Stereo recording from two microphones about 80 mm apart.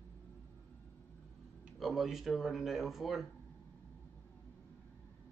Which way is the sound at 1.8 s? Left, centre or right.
Centre.